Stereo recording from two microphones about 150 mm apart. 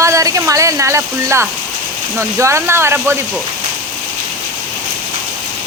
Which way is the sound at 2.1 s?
20° right (ahead or behind).